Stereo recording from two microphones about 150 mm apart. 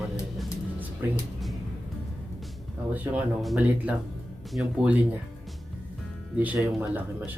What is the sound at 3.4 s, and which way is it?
Speech, 5° right (ahead or behind).